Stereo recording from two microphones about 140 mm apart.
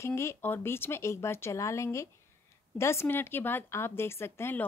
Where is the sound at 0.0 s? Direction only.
20° left (ahead or behind).